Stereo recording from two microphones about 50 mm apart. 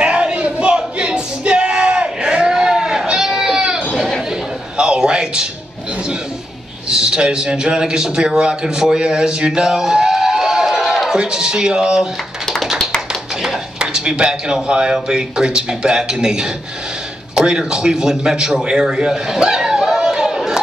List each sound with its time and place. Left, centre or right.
0.0 s music: right
4.3 s a sound: centre
6.9 s a man's voice: centre
13.1 s a man's voice: centre